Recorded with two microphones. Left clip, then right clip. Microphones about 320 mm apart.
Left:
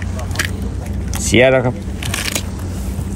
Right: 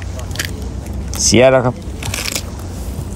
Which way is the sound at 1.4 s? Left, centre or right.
Centre.